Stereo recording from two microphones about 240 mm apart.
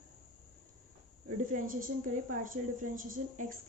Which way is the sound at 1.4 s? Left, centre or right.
Right.